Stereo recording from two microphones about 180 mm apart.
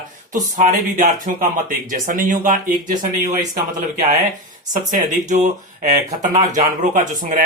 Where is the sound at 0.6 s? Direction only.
45° right (ahead or behind).